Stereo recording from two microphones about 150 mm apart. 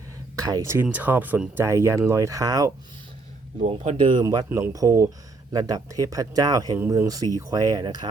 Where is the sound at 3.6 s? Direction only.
50° right (ahead or behind).